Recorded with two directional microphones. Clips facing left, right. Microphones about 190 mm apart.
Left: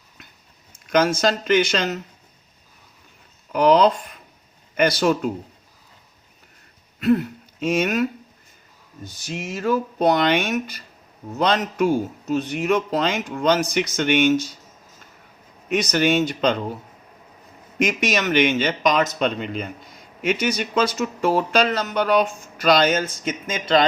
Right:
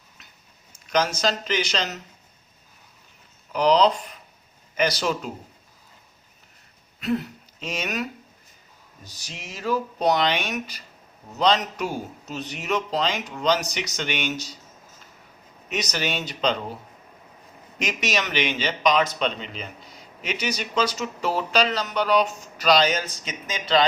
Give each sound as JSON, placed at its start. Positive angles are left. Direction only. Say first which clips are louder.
{"t": 0.9, "sound": "speech", "louder": "left 5 dB", "side_deg": 55}
{"t": 3.5, "sound": "speech", "louder": "left 3 dB", "side_deg": 55}
{"t": 7.6, "sound": "speech", "louder": "left 9 dB", "side_deg": 55}
{"t": 9.0, "sound": "speech", "louder": "left 11 dB", "side_deg": 55}
{"t": 15.7, "sound": "speech", "louder": "left 9 dB", "side_deg": 50}
{"t": 17.7, "sound": "speech", "louder": "left 5 dB", "side_deg": 50}